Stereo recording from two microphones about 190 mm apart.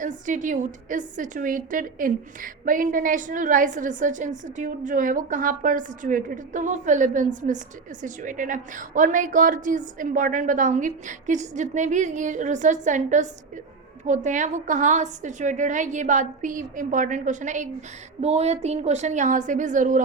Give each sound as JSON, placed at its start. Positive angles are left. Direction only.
{"t": 0.0, "sound": "a woman's voice", "side_deg": -40}